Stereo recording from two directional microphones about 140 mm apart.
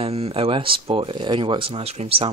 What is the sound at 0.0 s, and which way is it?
Speech, 45° right (ahead or behind).